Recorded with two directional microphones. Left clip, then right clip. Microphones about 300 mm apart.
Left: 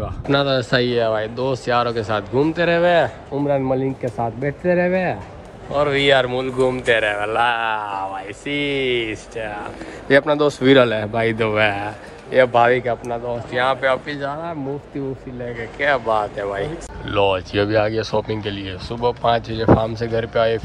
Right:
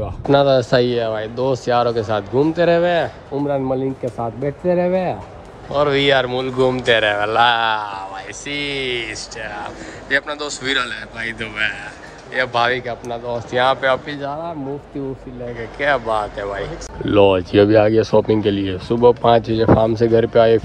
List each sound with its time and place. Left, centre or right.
0.3 s speech: centre
17.0 s speech: centre